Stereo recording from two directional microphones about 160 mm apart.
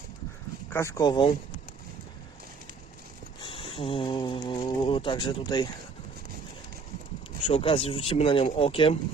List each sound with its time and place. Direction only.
0.7 s speech: 15° left (ahead or behind)
3.4 s speech: 35° left (ahead or behind)
7.4 s speech: 35° left (ahead or behind)